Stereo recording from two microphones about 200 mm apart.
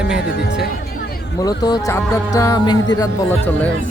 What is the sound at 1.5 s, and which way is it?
Speech, 20° left (ahead or behind).